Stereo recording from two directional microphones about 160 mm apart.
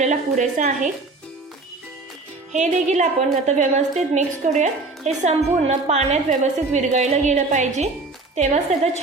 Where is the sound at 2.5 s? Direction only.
50° right (ahead or behind).